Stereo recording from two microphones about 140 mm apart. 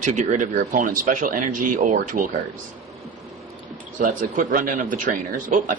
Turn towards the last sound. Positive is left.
turn(degrees=-65)  # may be behind; listen again after turning